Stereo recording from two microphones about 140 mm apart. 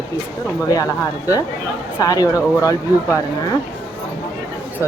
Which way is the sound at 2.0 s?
25° left (ahead or behind).